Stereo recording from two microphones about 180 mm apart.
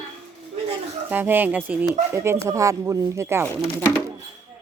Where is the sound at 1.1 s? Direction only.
10° right (ahead or behind).